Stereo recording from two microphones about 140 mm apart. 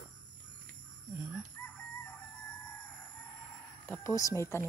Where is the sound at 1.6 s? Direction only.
10° left (ahead or behind).